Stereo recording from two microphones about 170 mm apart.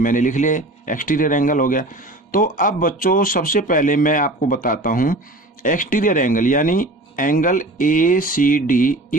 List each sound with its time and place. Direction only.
0.0 s speech: 50° left (ahead or behind)